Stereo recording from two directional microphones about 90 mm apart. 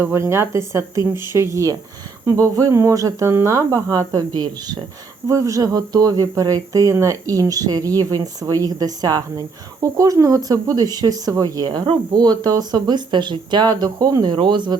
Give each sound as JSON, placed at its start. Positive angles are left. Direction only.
{"t": 0.0, "sound": "speech", "side_deg": -30}
{"t": 5.3, "sound": "speech", "side_deg": -35}
{"t": 14.3, "sound": "speech", "side_deg": -60}